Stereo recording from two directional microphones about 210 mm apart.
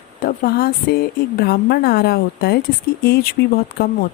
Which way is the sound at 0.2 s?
45° left (ahead or behind).